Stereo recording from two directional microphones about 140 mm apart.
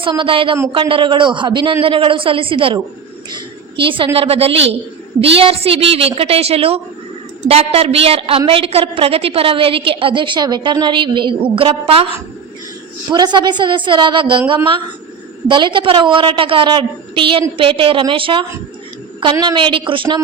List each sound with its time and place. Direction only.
0.0 s a woman's voice: 35° right (ahead or behind)
13.1 s a woman's voice: 30° right (ahead or behind)